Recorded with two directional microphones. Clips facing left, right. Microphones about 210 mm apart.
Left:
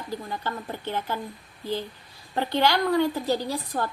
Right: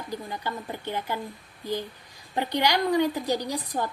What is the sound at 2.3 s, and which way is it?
A woman's voice, 15° right (ahead or behind).